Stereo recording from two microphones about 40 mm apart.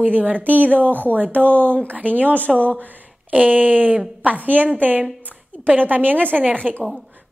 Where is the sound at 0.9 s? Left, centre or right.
Left.